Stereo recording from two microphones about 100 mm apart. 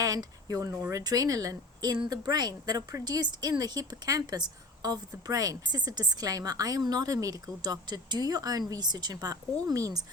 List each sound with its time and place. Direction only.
0.0 s speech: 40° right (ahead or behind)